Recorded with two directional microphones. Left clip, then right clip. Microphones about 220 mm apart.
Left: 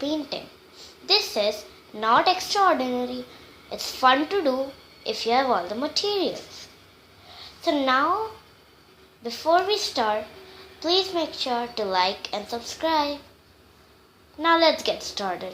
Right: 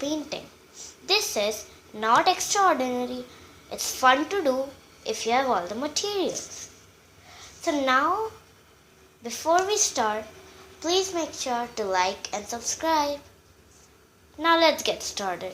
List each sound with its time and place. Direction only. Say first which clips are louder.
0.0 s a child's voice: left 2 dB; 25° right (ahead or behind)
7.3 s a sound: left 3 dB; 25° right (ahead or behind)
9.2 s a child's voice: left 2 dB; 25° right (ahead or behind)
14.3 s a child's voice: left 1 dB; 30° right (ahead or behind)